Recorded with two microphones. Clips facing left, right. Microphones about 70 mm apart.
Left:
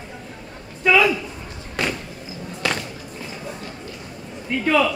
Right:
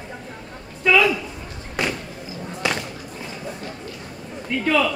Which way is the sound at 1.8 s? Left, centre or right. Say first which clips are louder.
Even; centre.